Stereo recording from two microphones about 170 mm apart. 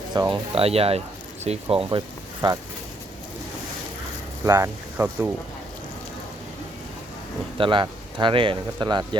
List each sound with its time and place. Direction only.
0.1 s speech: 25° right (ahead or behind)
4.4 s speech: 15° right (ahead or behind)
7.6 s speech: 30° right (ahead or behind)